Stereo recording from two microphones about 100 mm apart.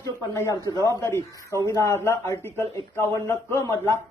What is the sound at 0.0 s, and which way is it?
A man's voice, 30° left (ahead or behind).